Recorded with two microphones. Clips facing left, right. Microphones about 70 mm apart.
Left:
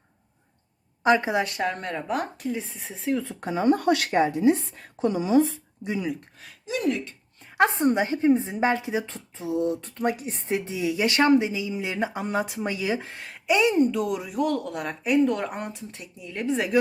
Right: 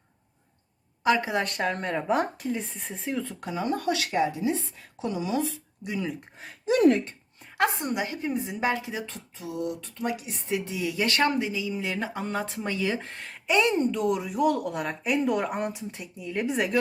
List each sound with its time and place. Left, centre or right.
1.0 s a woman's voice: left
1.4 s speech: centre
3.4 s a woman's voice: left
3.8 s a woman's voice: left
6.7 s speech: right
7.5 s a woman's voice: left
9.8 s a woman's voice: left
10.8 s speech: centre
14.4 s speech: centre